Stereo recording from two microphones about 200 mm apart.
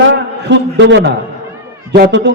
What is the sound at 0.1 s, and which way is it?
A man's voice, 65° right (ahead or behind).